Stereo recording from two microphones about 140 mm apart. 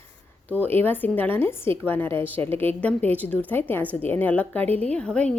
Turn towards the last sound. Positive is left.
turn(degrees=5)  # may be behind; listen again after turning